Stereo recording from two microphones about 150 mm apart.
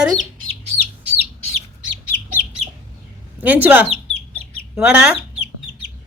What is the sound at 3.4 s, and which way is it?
Speech, 10° right (ahead or behind).